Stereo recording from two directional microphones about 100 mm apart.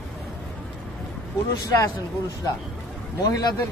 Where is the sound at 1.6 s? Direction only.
35° left (ahead or behind).